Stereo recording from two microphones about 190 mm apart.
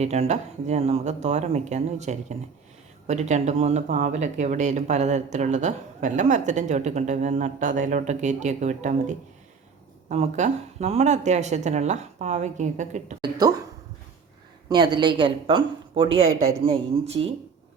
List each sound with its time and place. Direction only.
0.0 s speech: 35° right (ahead or behind)
14.7 s a woman's voice: 25° right (ahead or behind)